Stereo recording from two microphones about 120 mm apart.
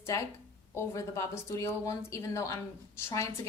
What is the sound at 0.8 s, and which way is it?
A woman's voice, 25° left (ahead or behind).